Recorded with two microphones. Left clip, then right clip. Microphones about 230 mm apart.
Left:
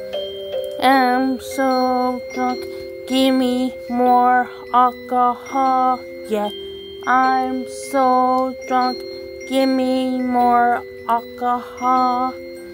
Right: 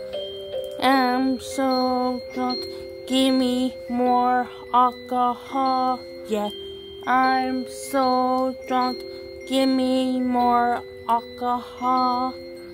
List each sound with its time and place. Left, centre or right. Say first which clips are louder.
0.1 s music: left 7 dB; left
0.7 s music: left 5 dB; centre